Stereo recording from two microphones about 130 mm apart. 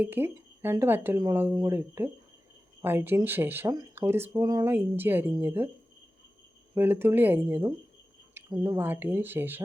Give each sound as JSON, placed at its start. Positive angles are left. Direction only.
{"t": 0.0, "sound": "speech", "side_deg": -15}
{"t": 6.7, "sound": "speech", "side_deg": -15}
{"t": 8.5, "sound": "speech", "side_deg": -25}
{"t": 8.8, "sound": "speech", "side_deg": -15}